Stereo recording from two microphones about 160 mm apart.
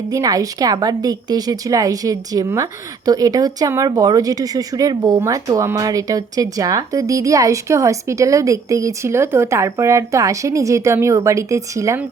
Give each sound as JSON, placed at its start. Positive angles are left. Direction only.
{"t": 0.1, "sound": "speech", "side_deg": -20}